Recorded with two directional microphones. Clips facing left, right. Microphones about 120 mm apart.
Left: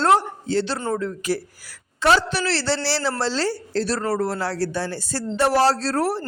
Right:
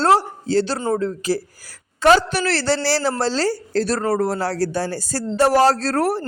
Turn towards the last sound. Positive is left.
turn(degrees=-50)  # may be behind; listen again after turning